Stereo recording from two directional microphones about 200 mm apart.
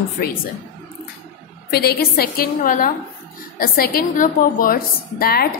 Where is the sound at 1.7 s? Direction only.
55° left (ahead or behind).